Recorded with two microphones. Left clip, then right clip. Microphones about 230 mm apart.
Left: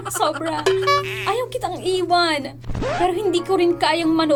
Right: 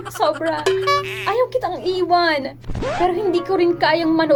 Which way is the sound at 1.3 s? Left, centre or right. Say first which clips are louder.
Right 5 dB; left.